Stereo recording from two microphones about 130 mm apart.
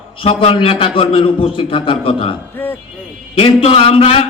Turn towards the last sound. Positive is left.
turn(degrees=45)  # may be behind; listen again after turning